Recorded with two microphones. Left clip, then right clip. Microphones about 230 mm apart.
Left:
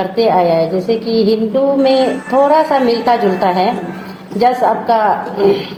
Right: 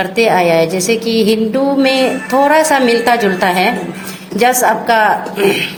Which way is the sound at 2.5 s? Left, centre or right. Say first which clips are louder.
Right 1 dB; right.